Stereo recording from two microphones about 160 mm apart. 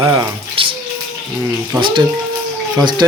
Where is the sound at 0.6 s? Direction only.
35° right (ahead or behind).